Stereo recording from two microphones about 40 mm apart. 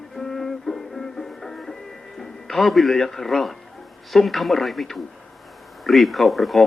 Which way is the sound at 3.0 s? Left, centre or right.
Centre.